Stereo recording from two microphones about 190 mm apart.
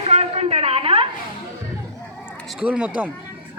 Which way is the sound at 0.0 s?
30° right (ahead or behind).